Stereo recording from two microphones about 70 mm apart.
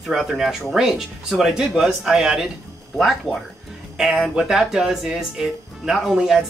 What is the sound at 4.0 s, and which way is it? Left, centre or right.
Speech, centre.